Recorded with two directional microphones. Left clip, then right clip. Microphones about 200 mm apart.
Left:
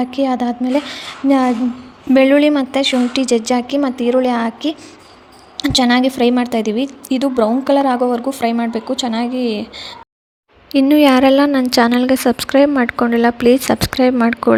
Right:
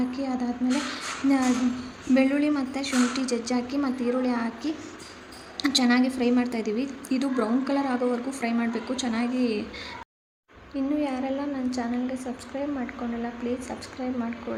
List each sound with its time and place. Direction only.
0.0 s a woman's voice: 40° left (ahead or behind)
10.8 s a woman's voice: 50° left (ahead or behind)